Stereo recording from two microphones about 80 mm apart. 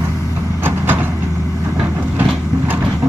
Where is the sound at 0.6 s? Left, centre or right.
Right.